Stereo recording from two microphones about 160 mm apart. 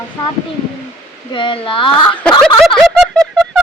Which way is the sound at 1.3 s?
30° left (ahead or behind).